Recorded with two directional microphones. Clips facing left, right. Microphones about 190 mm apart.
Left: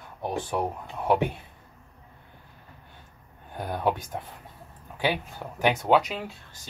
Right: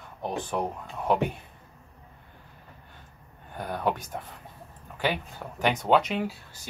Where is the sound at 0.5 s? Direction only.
10° left (ahead or behind).